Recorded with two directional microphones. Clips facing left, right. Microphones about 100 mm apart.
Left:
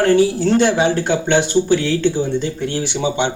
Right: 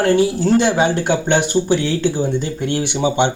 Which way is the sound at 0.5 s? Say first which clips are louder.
Even; 10° right (ahead or behind).